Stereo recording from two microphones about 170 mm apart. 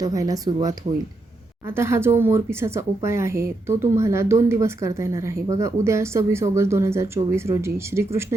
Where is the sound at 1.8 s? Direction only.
15° right (ahead or behind).